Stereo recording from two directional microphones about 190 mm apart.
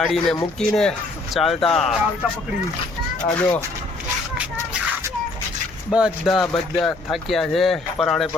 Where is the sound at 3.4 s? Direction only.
10° left (ahead or behind).